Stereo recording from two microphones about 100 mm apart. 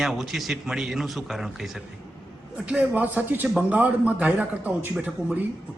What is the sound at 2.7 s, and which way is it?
Speech, 15° right (ahead or behind).